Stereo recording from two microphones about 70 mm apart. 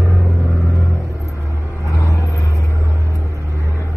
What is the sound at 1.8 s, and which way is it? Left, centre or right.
Vehicle, left.